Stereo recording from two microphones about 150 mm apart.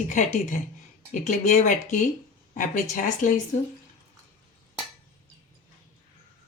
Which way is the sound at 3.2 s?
55° left (ahead or behind).